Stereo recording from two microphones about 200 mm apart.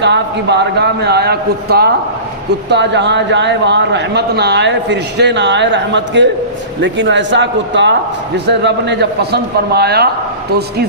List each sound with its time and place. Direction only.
0.0 s a man's voice: 60° right (ahead or behind)